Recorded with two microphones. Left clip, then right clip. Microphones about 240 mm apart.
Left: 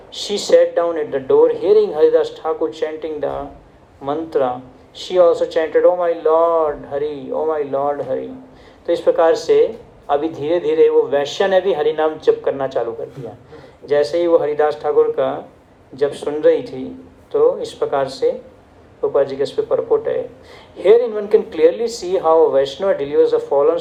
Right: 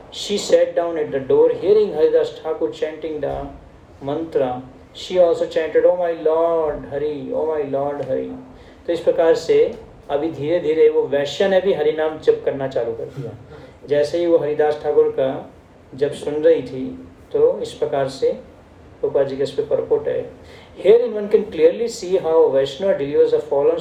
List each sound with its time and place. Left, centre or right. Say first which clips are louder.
0.1 s speech: left 3 dB; left
10.4 s speech: even; left
13.8 s speech: left 2 dB; left